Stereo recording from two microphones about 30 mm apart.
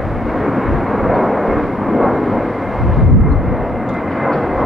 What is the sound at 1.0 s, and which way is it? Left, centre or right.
Vehicle, centre.